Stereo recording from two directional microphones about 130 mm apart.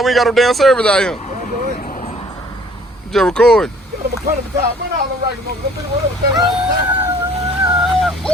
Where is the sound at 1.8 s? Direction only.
80° left.